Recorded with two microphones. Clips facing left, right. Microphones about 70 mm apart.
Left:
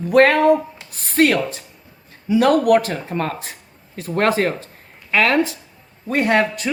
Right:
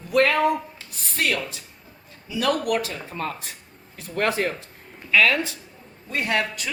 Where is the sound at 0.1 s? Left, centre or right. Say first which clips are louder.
Left 7 dB; left.